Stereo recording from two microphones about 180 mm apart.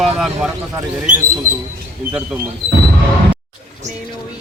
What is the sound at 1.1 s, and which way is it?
Speech, 45° right (ahead or behind).